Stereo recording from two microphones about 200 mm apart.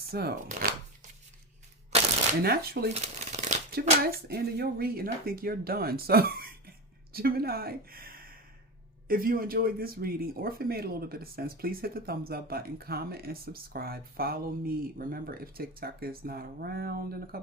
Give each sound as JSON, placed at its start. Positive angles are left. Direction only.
{"t": 0.1, "sound": "speech", "side_deg": -50}
{"t": 2.4, "sound": "speech", "side_deg": -50}
{"t": 2.9, "sound": "speech", "side_deg": -35}